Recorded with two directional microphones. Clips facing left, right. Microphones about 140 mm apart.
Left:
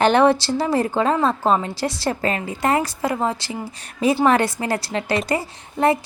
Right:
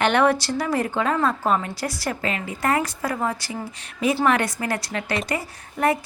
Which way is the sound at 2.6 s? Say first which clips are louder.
Left 2 dB; 25° left (ahead or behind).